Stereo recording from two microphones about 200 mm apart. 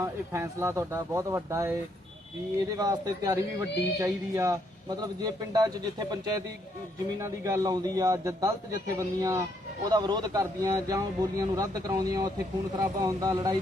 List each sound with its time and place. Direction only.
0.0 s speech: 15° right (ahead or behind)